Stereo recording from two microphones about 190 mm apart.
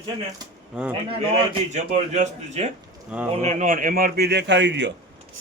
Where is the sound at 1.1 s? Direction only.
35° right (ahead or behind).